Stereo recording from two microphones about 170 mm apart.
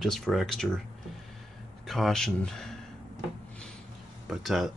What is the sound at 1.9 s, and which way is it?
Speech, centre (ahead or behind).